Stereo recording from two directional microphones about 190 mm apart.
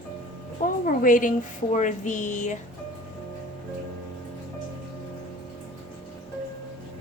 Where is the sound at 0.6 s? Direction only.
45° left (ahead or behind).